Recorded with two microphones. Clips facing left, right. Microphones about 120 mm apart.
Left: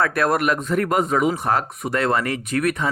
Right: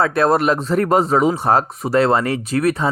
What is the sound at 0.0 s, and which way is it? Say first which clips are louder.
Speech: right 4 dB; 25° right (ahead or behind).